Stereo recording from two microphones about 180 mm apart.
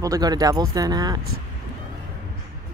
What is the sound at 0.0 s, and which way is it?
Speech, 20° right (ahead or behind).